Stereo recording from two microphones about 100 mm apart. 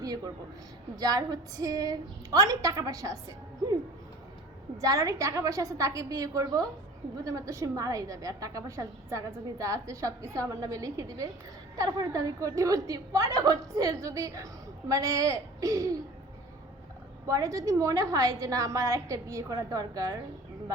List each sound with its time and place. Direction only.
0.9 s a woman's voice: 40° right (ahead or behind)
4.8 s a woman's voice: 35° right (ahead or behind)
17.2 s a woman's voice: 35° right (ahead or behind)